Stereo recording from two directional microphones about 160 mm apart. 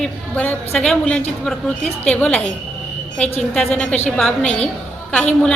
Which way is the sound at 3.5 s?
5° left (ahead or behind).